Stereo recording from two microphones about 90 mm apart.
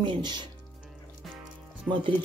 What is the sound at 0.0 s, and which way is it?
Speech, 60° right (ahead or behind).